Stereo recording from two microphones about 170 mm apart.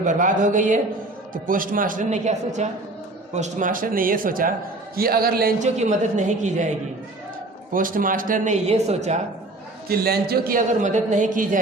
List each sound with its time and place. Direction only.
0.0 s a man's voice: 50° right (ahead or behind)
5.5 s a man's voice: 45° right (ahead or behind)
7.7 s a man's voice: 55° right (ahead or behind)
9.9 s a man's voice: 65° right (ahead or behind); by 11.6 s 50° right (ahead or behind)